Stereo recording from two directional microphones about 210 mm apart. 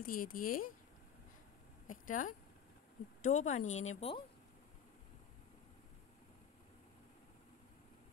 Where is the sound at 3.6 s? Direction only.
75° left (ahead or behind).